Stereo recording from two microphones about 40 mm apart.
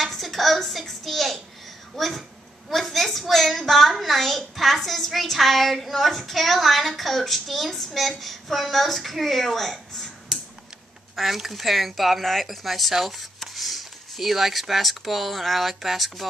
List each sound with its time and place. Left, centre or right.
0.0 s a sound: centre
2.0 s a woman's voice: centre
10.3 s typing: centre
11.1 s a woman's voice: centre